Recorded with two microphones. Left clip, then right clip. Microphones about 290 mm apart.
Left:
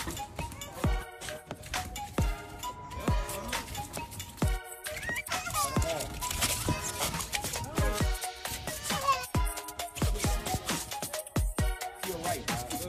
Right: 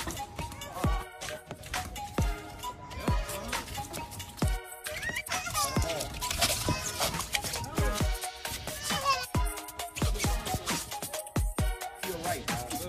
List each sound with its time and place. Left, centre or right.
0.0 s music: centre
5.7 s music: centre